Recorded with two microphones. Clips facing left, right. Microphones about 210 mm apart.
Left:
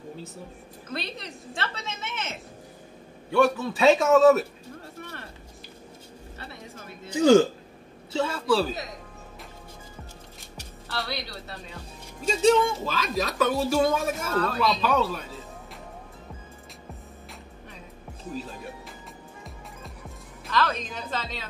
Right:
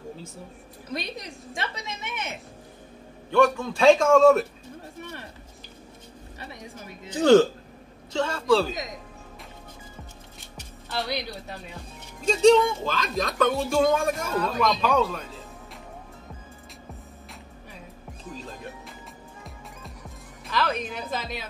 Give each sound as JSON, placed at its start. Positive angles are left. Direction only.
{"t": 0.8, "sound": "a woman's voice", "side_deg": -15}
{"t": 3.3, "sound": "speech", "side_deg": 5}
{"t": 6.4, "sound": "a sound", "side_deg": -15}
{"t": 7.1, "sound": "speech", "side_deg": 10}
{"t": 10.9, "sound": "a woman's voice", "side_deg": -15}
{"t": 12.3, "sound": "speech", "side_deg": 5}
{"t": 14.3, "sound": "a woman's voice", "side_deg": -10}
{"t": 14.9, "sound": "speech", "side_deg": 5}
{"t": 20.5, "sound": "a woman's voice", "side_deg": -10}